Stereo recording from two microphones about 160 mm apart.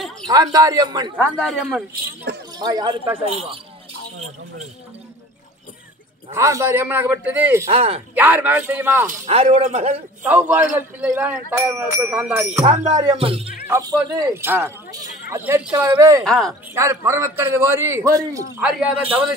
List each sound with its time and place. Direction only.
0.3 s speech: 25° right (ahead or behind)
1.2 s a man's voice: 5° left (ahead or behind)
2.3 s speech: 90° right
2.6 s speech: 25° right (ahead or behind)
6.3 s a man's voice: 15° right (ahead or behind)
7.7 s a man's voice: 40° right (ahead or behind)
8.1 s a man's voice: 10° right (ahead or behind)
9.0 s a man's voice: 50° right (ahead or behind)
10.2 s a man's voice: 10° right (ahead or behind)
12.9 s a man's voice: 25° right (ahead or behind)
13.7 s a man's voice: 20° right (ahead or behind)
16.3 s a man's voice: centre (ahead or behind)
16.7 s a man's voice: 15° right (ahead or behind)
18.6 s a man's voice: 5° right (ahead or behind)